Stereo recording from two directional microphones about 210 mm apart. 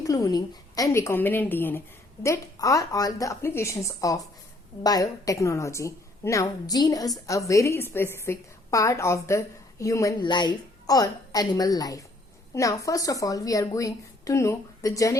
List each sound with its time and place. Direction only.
0.0 s a woman's voice: 15° left (ahead or behind)